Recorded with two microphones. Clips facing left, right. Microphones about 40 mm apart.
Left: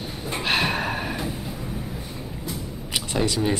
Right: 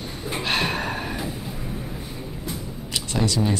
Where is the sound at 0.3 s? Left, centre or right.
Centre.